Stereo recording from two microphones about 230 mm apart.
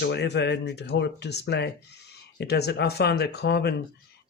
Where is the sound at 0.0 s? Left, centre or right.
Left.